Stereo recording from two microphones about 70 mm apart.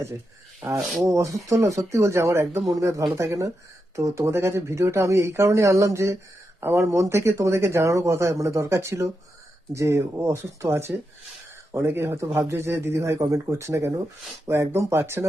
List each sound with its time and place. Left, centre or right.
0.6 s speech: right
2.6 s speech: right
3.2 s speech: right
4.3 s speech: right